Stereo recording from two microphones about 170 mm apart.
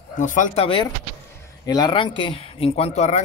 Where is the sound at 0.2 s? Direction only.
50° left (ahead or behind).